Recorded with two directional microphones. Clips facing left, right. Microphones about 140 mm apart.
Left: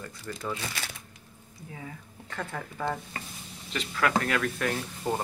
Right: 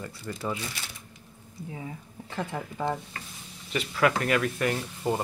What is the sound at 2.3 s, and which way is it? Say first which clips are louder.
Speech: right 3 dB; 15° right (ahead or behind).